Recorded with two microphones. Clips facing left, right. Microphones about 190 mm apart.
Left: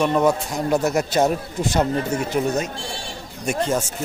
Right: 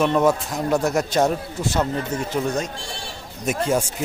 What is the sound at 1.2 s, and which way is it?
Speech, 15° left (ahead or behind).